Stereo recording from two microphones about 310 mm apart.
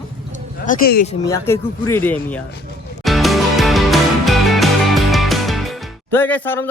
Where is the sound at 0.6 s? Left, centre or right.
Left.